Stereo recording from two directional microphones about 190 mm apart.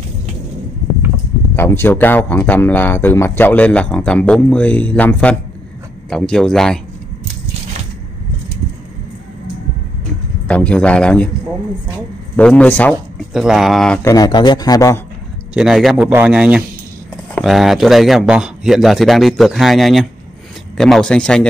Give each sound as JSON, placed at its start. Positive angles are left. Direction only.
{"t": 1.6, "sound": "a man's voice", "side_deg": 10}
{"t": 10.5, "sound": "speech", "side_deg": 5}
{"t": 12.4, "sound": "speech", "side_deg": 5}
{"t": 13.3, "sound": "a man's voice", "side_deg": 0}
{"t": 14.0, "sound": "speech", "side_deg": 20}
{"t": 15.5, "sound": "a man's voice", "side_deg": 0}